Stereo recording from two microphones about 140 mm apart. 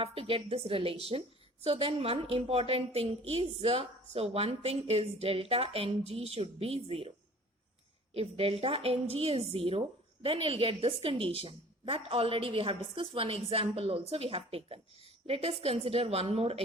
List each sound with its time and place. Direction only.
0.0 s a woman's voice: 40° right (ahead or behind)
8.1 s a woman's voice: 45° right (ahead or behind)